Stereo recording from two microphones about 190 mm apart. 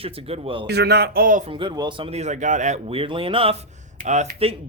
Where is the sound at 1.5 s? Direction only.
25° right (ahead or behind).